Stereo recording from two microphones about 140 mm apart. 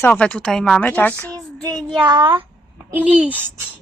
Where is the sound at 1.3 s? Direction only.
25° right (ahead or behind).